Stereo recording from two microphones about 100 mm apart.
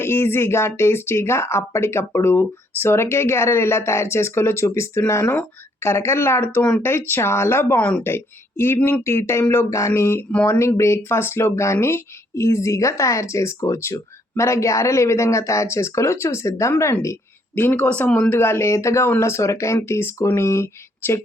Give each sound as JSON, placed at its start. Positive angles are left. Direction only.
{"t": 0.0, "sound": "speech", "side_deg": 25}
{"t": 7.8, "sound": "speech", "side_deg": 10}
{"t": 8.0, "sound": "speech", "side_deg": 25}